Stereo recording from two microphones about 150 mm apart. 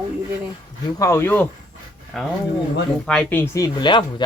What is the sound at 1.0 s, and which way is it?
Speech, 20° left (ahead or behind).